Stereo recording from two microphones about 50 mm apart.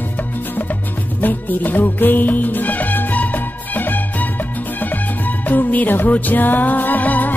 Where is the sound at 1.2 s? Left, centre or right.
Left.